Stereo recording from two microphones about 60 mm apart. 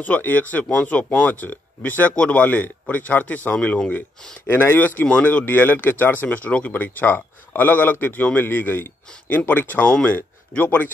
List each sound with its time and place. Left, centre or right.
0.0 s speech: left
4.5 s speech: left